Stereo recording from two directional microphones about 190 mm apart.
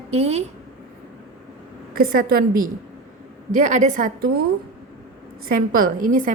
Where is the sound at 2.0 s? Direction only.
50° right (ahead or behind).